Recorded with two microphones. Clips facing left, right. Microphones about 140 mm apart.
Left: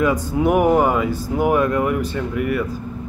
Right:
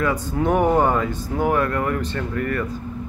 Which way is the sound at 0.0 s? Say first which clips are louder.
Left 4 dB; 10° left (ahead or behind).